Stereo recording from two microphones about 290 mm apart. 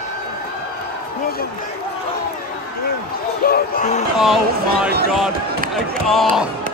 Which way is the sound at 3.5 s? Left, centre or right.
Left.